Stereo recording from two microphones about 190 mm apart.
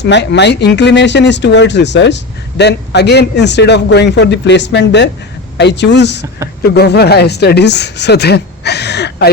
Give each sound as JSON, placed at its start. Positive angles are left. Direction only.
{"t": 0.0, "sound": "speech", "side_deg": 65}